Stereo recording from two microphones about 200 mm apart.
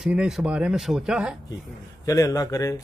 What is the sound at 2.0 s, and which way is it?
Speech, 15° left (ahead or behind).